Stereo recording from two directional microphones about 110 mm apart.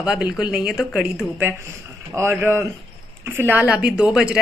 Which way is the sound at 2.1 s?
25° right (ahead or behind).